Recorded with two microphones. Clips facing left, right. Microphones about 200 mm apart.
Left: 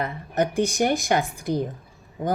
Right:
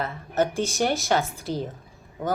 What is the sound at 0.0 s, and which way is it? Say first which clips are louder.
A woman's voice: even; 15° left (ahead or behind).